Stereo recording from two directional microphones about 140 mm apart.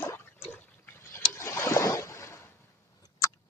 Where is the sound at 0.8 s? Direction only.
15° left (ahead or behind).